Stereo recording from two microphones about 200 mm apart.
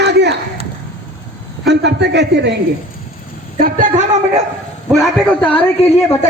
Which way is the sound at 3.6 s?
40° right (ahead or behind).